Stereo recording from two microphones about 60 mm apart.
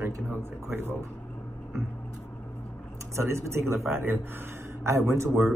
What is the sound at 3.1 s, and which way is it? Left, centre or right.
A man's voice, right.